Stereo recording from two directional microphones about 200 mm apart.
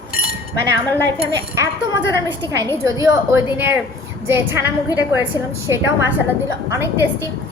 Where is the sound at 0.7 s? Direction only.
15° right (ahead or behind).